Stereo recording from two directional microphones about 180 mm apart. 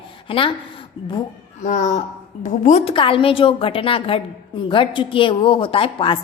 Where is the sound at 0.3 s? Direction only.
30° left (ahead or behind).